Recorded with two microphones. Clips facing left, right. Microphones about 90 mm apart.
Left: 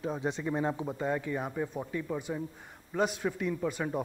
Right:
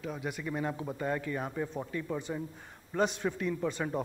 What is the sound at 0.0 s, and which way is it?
Speech, 30° left (ahead or behind).